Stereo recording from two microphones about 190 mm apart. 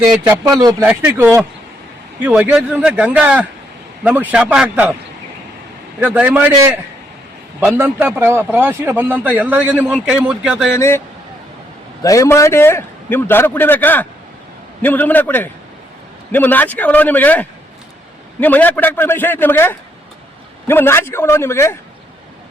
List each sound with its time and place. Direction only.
0.6 s a man's voice: 20° right (ahead or behind); by 4.9 s 5° right (ahead or behind)
6.0 s a man's voice: 10° right (ahead or behind)
10.8 s a man's voice: 15° left (ahead or behind)
12.0 s a man's voice: 15° left (ahead or behind)